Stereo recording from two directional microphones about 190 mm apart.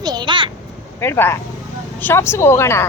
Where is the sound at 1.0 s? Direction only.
10° left (ahead or behind).